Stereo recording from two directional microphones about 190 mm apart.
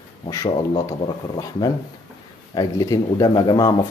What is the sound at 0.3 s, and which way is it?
Speech, 20° left (ahead or behind).